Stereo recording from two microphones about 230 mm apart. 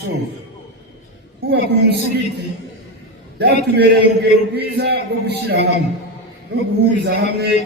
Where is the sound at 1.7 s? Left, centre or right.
Right.